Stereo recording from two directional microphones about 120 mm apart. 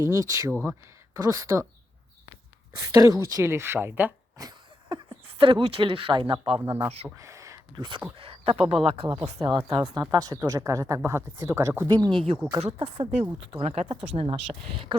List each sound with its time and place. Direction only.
0.1 s speech: 25° right (ahead or behind)
2.7 s speech: 30° right (ahead or behind)
4.4 s a sound: 35° right (ahead or behind)
6.6 s speech: 20° right (ahead or behind)
7.2 s a sound: 25° right (ahead or behind)
7.8 s speech: 40° right (ahead or behind)
8.1 s speech: 50° right (ahead or behind)
10.1 s speech: 30° right (ahead or behind)
12.5 s speech: 55° right (ahead or behind)
13.8 s speech: 50° right (ahead or behind)